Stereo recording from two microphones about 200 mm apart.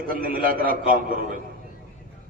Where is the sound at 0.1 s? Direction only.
45° right (ahead or behind).